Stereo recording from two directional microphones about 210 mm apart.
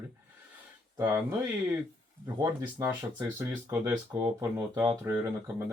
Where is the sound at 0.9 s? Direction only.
15° right (ahead or behind).